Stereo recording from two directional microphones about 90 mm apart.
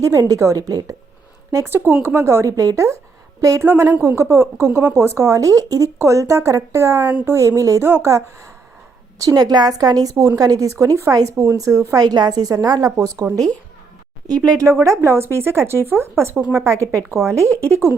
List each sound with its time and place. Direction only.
0.0 s a woman's voice: 40° right (ahead or behind)
1.5 s a woman's voice: 30° right (ahead or behind)
9.1 s a woman's voice: 40° right (ahead or behind)
12.0 s a woman's voice: 50° right (ahead or behind); by 16.3 s 30° right (ahead or behind)
16.3 s a woman's voice: 15° right (ahead or behind)
16.6 s a woman's voice: 35° right (ahead or behind)